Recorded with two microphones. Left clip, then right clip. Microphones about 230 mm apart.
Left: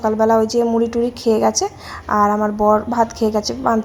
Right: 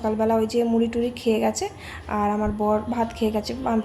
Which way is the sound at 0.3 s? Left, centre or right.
Centre.